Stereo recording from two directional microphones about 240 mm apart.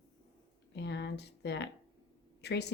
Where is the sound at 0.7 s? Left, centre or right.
Left.